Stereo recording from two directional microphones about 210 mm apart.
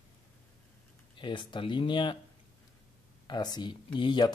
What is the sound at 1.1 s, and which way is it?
Speech, 25° left (ahead or behind).